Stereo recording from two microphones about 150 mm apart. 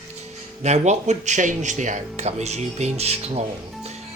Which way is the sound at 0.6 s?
50° right (ahead or behind).